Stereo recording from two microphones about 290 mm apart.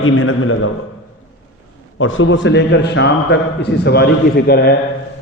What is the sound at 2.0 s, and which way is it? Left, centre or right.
A man's voice, left.